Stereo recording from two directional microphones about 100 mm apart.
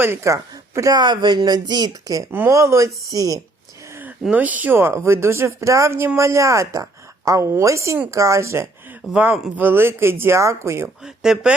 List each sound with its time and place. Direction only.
0.0 s speech: 25° right (ahead or behind)
0.9 s speech: 50° right (ahead or behind)
4.3 s speech: 15° right (ahead or behind)
9.1 s speech: 15° right (ahead or behind)
11.0 s speech: 5° right (ahead or behind)